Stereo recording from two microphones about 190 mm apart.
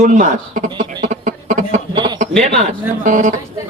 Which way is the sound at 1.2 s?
45° right (ahead or behind).